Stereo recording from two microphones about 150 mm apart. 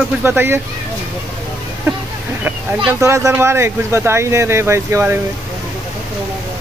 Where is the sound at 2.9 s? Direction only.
20° right (ahead or behind).